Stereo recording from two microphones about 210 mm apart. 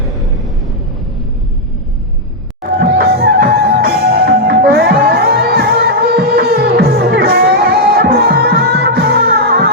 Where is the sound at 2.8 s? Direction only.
45° right (ahead or behind).